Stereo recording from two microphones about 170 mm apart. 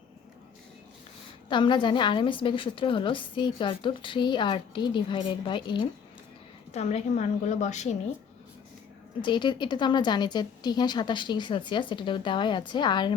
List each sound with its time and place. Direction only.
1.5 s a woman's voice: 30° left (ahead or behind)
6.7 s a woman's voice: 40° left (ahead or behind)
9.2 s a woman's voice: 25° left (ahead or behind)